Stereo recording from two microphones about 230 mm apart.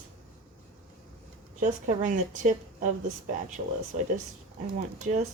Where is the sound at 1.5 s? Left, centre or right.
Right.